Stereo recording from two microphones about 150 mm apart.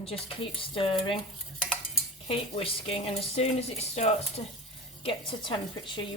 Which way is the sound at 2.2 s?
40° left (ahead or behind).